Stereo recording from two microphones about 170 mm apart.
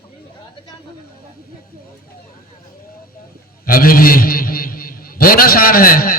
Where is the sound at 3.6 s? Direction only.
55° left (ahead or behind).